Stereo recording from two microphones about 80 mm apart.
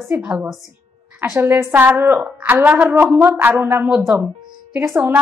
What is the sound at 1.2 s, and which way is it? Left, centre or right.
A woman's voice, right.